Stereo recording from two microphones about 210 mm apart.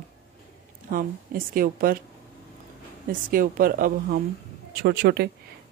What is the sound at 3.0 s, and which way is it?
A woman's voice, 40° right (ahead or behind).